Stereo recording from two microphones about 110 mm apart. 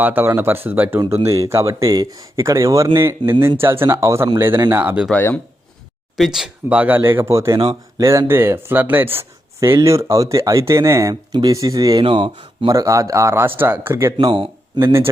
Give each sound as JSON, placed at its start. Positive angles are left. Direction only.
{"t": 0.0, "sound": "speech", "side_deg": -15}
{"t": 5.1, "sound": "speech", "side_deg": 15}
{"t": 6.1, "sound": "speech", "side_deg": 0}
{"t": 6.7, "sound": "speech", "side_deg": -15}
{"t": 7.6, "sound": "speech", "side_deg": -35}
{"t": 8.3, "sound": "speech", "side_deg": -20}
{"t": 9.6, "sound": "speech", "side_deg": -30}
{"t": 11.1, "sound": "speech", "side_deg": -40}
{"t": 12.0, "sound": "speech", "side_deg": -50}
{"t": 12.6, "sound": "speech", "side_deg": -30}